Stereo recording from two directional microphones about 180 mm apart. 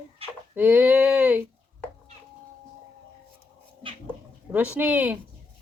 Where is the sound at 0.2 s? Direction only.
30° right (ahead or behind).